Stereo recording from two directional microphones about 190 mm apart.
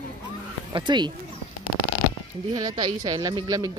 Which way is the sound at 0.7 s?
25° right (ahead or behind).